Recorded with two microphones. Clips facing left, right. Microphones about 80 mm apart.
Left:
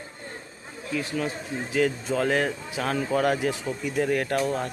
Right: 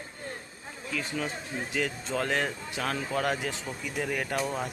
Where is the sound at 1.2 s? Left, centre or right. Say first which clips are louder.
Left 4 dB; centre.